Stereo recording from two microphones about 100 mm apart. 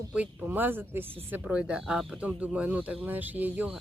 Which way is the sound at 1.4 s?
10° right (ahead or behind).